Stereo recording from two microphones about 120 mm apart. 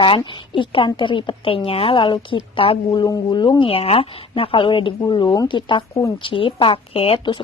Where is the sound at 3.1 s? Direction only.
35° left (ahead or behind).